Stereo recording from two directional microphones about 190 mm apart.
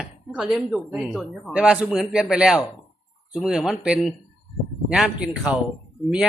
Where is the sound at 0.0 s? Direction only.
Centre (ahead or behind).